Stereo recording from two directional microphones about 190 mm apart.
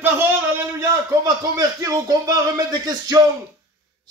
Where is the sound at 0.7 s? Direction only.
20° right (ahead or behind).